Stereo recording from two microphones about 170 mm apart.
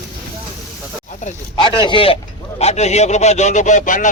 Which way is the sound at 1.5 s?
30° left (ahead or behind).